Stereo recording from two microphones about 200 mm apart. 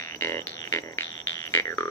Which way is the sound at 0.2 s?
15° left (ahead or behind).